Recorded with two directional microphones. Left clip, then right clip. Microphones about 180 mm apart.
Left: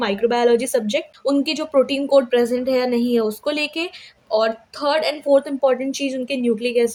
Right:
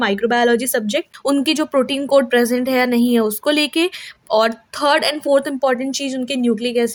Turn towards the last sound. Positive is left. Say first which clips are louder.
# even
turn(degrees=-25)  # may be behind; listen again after turning